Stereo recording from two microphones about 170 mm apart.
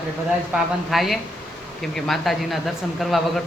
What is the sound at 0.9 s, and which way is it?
A man's voice, centre (ahead or behind).